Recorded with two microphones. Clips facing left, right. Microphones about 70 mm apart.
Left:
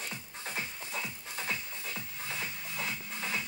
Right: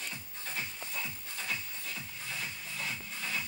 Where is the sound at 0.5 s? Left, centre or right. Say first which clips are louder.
Left 1 dB; centre.